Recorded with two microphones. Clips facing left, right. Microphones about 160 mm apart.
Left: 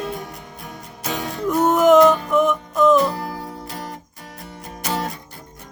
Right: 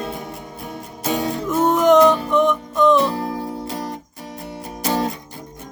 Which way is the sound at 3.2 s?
25° right (ahead or behind).